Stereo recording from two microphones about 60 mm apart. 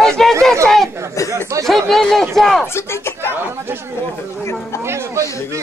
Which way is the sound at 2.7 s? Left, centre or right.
Left.